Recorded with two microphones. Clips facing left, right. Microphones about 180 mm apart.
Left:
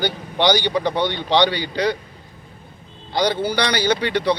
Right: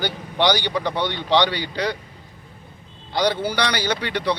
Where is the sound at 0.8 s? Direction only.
15° left (ahead or behind).